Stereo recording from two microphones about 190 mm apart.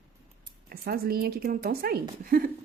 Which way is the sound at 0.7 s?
55° right (ahead or behind).